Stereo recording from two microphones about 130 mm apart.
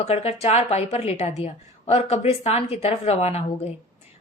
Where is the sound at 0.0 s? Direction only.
50° left (ahead or behind).